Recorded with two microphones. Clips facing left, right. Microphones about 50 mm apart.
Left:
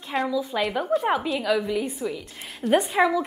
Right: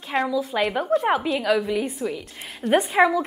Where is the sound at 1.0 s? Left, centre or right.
Centre.